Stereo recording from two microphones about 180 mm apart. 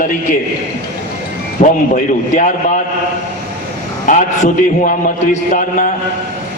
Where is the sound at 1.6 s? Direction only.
40° left (ahead or behind).